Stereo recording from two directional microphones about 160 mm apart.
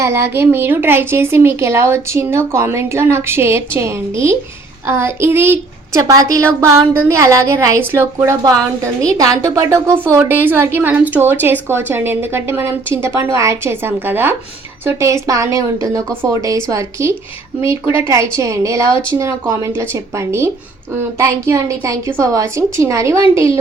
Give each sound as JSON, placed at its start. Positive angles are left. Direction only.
{"t": 0.0, "sound": "a woman's voice", "side_deg": -15}